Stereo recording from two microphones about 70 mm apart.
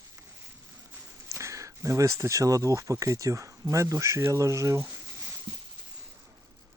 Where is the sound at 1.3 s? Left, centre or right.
Right.